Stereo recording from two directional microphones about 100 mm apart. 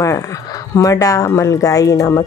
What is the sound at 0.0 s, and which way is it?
Speech, 30° left (ahead or behind).